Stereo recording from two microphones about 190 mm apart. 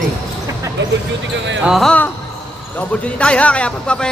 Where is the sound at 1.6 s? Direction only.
Centre (ahead or behind).